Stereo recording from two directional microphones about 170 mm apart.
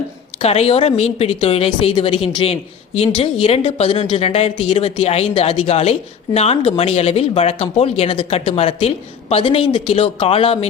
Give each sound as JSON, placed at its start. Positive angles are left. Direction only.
{"t": 0.4, "sound": "speech", "side_deg": 35}